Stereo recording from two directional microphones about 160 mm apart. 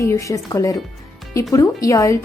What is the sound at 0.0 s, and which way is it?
A woman's voice, 20° left (ahead or behind).